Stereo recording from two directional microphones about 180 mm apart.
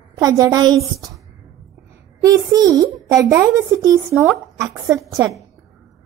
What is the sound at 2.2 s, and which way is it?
A woman's voice, 20° right (ahead or behind).